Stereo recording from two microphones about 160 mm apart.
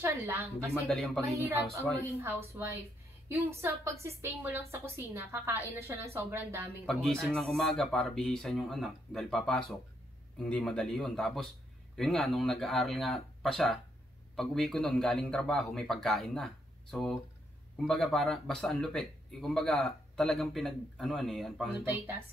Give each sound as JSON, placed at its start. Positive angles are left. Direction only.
{"t": 0.0, "sound": "a woman's voice", "side_deg": -15}
{"t": 0.8, "sound": "speech", "side_deg": 0}
{"t": 1.2, "sound": "a woman's voice", "side_deg": -20}
{"t": 6.9, "sound": "speech", "side_deg": 5}